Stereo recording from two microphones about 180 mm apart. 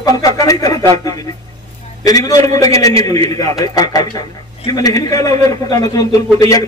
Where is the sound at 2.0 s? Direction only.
20° left (ahead or behind).